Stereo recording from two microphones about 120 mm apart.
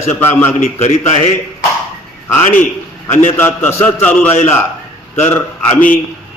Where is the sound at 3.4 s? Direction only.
20° left (ahead or behind).